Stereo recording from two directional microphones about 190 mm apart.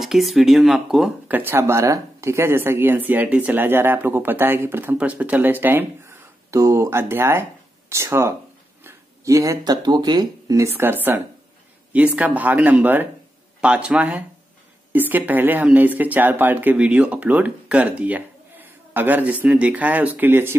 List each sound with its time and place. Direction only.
0.0 s speech: centre (ahead or behind)